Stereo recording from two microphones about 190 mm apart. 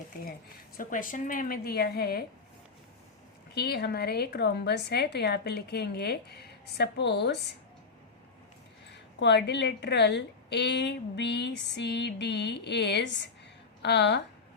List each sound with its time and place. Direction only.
0.8 s a woman's voice: 45° left (ahead or behind)
3.5 s a woman's voice: 55° left (ahead or behind)
8.9 s a woman's voice: 65° left (ahead or behind)